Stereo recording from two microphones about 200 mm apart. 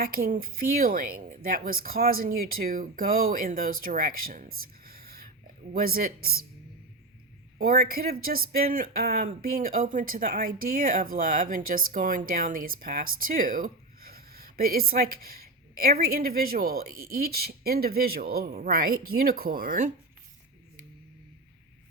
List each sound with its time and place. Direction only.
0.0 s speech: 45° right (ahead or behind)
4.9 s whispering: 50° right (ahead or behind)
5.7 s speech: 50° right (ahead or behind)
7.6 s a woman's voice: 50° right (ahead or behind)